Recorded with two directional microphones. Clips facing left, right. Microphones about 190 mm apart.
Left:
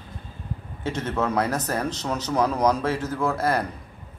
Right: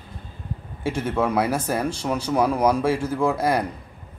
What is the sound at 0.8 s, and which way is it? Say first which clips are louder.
A man's voice: right 3 dB; 10° right (ahead or behind).